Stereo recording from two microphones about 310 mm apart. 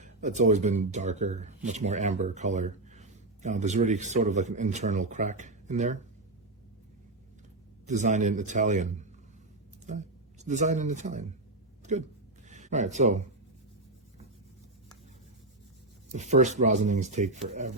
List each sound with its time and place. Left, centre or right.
0.0 s speech: right
7.9 s speech: right
12.5 s speech: right
16.1 s speech: right